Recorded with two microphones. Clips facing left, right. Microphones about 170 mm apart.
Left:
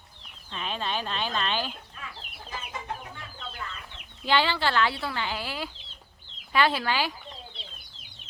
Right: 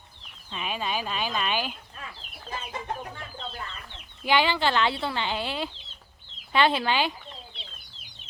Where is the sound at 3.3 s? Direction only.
35° right (ahead or behind).